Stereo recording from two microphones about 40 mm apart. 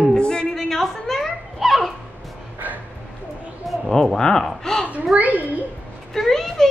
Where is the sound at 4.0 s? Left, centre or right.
Left.